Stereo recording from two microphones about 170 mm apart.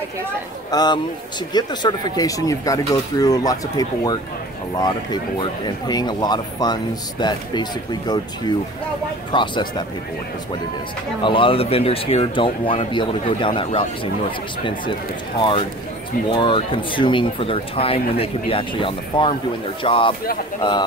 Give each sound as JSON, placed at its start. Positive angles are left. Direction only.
{"t": 0.7, "sound": "speech", "side_deg": 25}
{"t": 11.2, "sound": "speech", "side_deg": 30}